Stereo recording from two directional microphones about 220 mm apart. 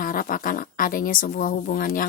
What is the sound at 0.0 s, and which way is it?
Speech, 40° left (ahead or behind).